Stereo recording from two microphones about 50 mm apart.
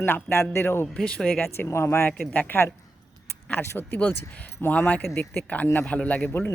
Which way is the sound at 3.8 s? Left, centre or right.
Left.